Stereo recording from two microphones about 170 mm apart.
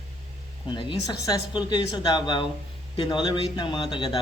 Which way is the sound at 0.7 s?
30° left (ahead or behind).